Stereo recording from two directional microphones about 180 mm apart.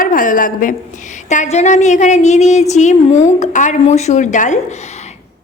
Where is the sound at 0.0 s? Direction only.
50° left (ahead or behind).